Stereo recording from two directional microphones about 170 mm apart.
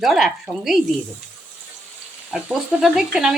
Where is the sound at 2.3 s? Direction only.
5° right (ahead or behind).